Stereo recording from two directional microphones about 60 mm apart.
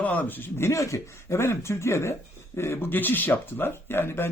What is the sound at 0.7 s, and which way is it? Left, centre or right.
Speech, left.